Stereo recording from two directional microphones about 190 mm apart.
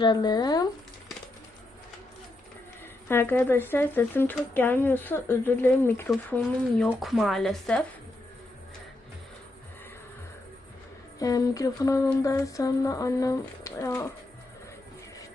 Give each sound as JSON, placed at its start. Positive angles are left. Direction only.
{"t": 0.0, "sound": "speech", "side_deg": 20}
{"t": 3.1, "sound": "speech", "side_deg": 10}
{"t": 11.2, "sound": "speech", "side_deg": 20}